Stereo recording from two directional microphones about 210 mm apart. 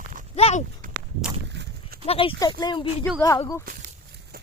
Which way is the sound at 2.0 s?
25° left (ahead or behind).